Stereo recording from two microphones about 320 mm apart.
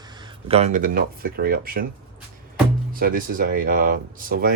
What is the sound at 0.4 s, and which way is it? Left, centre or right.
Speech, centre.